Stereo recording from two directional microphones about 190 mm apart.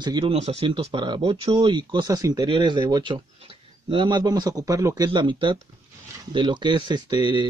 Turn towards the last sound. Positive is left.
turn(degrees=-25)  # may be behind; listen again after turning